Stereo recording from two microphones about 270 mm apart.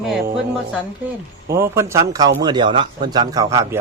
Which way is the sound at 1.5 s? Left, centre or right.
Centre.